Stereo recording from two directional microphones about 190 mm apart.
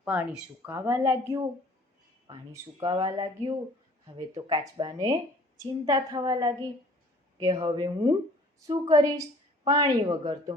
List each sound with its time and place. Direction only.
0.0 s speech: 10° right (ahead or behind)